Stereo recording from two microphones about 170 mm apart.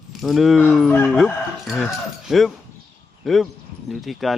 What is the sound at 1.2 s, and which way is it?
Speech, centre (ahead or behind).